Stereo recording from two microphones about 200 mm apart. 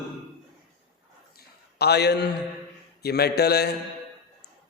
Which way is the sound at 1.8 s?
55° left (ahead or behind).